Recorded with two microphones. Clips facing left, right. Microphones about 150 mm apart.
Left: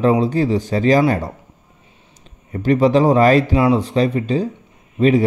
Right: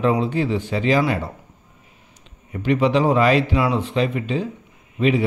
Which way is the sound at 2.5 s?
40° left (ahead or behind).